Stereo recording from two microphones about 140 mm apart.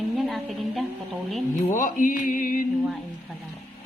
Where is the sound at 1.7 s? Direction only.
70° left (ahead or behind).